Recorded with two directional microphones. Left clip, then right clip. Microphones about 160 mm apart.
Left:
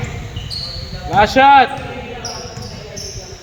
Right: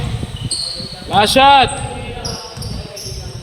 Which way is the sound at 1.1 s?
50° right (ahead or behind).